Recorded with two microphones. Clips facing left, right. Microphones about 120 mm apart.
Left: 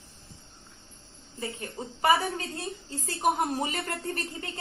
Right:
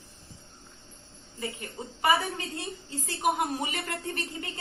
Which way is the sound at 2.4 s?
25° left (ahead or behind).